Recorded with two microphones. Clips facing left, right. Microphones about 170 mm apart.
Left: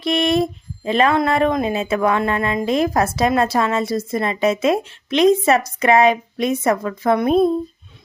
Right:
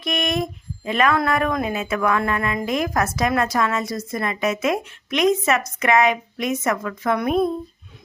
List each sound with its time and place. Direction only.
0.0 s speech: 30° left (ahead or behind)